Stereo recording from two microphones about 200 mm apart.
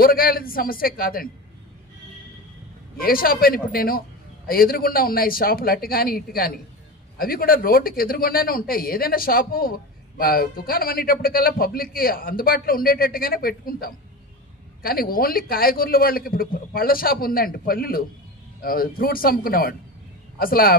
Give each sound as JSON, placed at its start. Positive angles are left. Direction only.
{"t": 0.0, "sound": "speech", "side_deg": 45}
{"t": 3.0, "sound": "speech", "side_deg": 45}